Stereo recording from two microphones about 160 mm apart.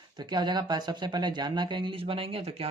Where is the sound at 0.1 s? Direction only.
25° right (ahead or behind).